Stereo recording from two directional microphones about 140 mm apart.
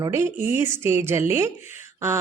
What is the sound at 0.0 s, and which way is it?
A woman's voice, 20° right (ahead or behind).